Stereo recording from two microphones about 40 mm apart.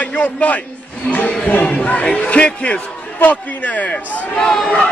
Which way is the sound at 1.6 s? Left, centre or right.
Left.